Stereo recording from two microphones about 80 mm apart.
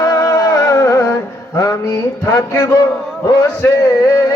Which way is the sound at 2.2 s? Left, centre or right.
Left.